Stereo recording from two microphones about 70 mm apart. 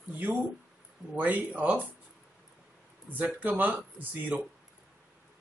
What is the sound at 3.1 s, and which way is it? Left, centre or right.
A man's voice, right.